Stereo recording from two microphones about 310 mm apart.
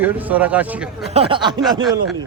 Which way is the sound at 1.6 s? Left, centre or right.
Centre.